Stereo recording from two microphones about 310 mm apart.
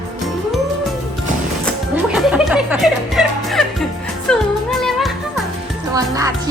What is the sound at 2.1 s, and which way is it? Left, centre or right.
Music, centre.